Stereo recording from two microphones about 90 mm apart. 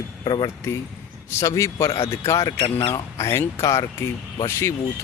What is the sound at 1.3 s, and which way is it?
Speech, 30° left (ahead or behind).